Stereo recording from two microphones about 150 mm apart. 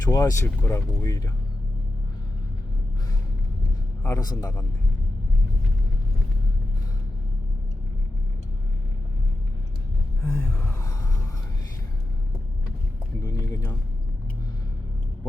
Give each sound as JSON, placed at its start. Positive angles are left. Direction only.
{"t": 0.0, "sound": "speech", "side_deg": 20}
{"t": 4.0, "sound": "speech", "side_deg": 25}
{"t": 10.2, "sound": "gasp", "side_deg": 15}
{"t": 13.2, "sound": "speech", "side_deg": 25}